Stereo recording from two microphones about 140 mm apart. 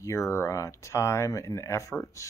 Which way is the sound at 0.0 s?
20° left (ahead or behind).